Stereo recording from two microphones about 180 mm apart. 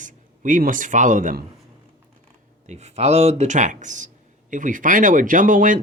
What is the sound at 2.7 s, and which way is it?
Speech, 35° right (ahead or behind).